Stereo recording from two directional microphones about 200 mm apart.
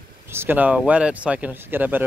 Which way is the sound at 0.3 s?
10° right (ahead or behind).